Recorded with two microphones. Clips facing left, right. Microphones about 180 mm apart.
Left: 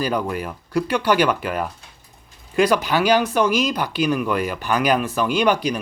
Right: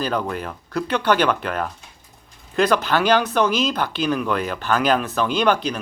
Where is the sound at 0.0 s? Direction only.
10° left (ahead or behind).